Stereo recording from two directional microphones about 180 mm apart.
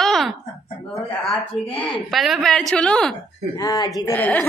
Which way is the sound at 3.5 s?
20° left (ahead or behind).